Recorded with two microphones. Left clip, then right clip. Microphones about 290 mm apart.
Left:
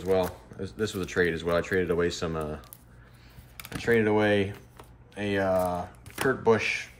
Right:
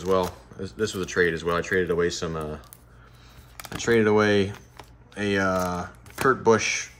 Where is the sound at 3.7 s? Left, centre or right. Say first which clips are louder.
Right 3 dB; centre.